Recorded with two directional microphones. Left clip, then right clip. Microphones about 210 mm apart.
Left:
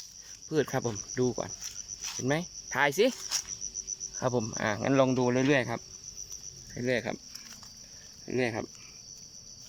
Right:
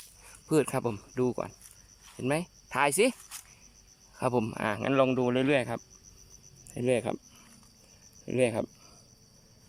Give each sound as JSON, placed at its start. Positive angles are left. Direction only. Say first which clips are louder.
{"t": 0.4, "sound": "cricket", "louder": "right 2 dB", "side_deg": -5}
{"t": 1.6, "sound": "a sound", "louder": "left 16 dB", "side_deg": 50}
{"t": 2.1, "sound": "speech", "louder": "right 1 dB", "side_deg": -5}
{"t": 3.2, "sound": "speech", "louder": "left 14 dB", "side_deg": 35}
{"t": 4.1, "sound": "speech", "louder": "right 2 dB", "side_deg": -5}
{"t": 6.7, "sound": "cricket", "louder": "right 2 dB", "side_deg": -10}
{"t": 8.3, "sound": "cricket", "louder": "right 3 dB", "side_deg": -10}